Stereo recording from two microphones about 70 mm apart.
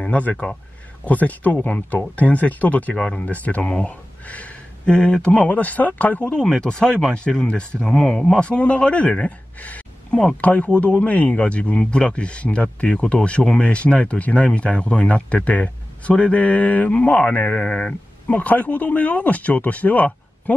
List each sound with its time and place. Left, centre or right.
0.0 s speech: centre